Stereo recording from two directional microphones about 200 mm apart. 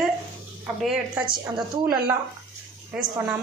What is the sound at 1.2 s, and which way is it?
Speech, 20° right (ahead or behind).